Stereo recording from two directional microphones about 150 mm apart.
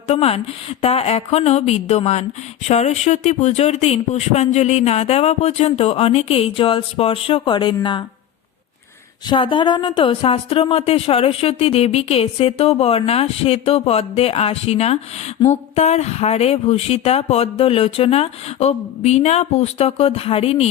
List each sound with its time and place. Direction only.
0.1 s speech: 40° left (ahead or behind)
9.2 s a woman's voice: 35° left (ahead or behind)